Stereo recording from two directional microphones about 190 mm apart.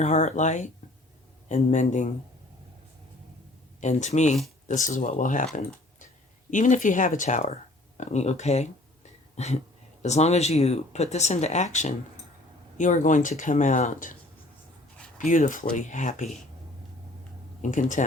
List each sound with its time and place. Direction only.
0.0 s speech: 35° left (ahead or behind)
3.8 s speech: 40° left (ahead or behind)
6.5 s speech: 40° left (ahead or behind)
15.2 s speech: 40° left (ahead or behind)
17.6 s speech: 40° left (ahead or behind)